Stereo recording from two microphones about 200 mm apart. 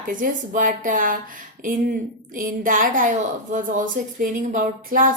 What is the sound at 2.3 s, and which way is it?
A woman's voice, 45° right (ahead or behind).